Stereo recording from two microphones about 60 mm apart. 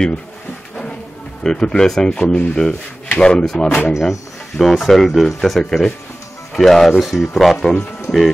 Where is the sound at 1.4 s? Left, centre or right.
Centre.